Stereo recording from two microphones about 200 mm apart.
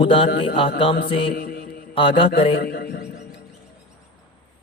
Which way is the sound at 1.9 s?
25° left (ahead or behind).